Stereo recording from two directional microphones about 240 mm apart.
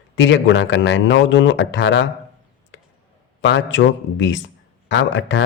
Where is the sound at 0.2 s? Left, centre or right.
Left.